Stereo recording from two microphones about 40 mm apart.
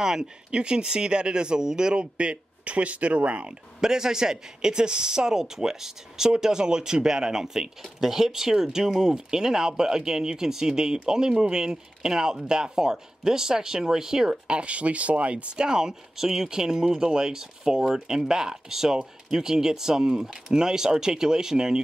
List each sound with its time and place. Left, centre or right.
0.0 s speech: centre; by 3.5 s right
3.8 s speech: centre
14.6 s speech: right; by 21.8 s centre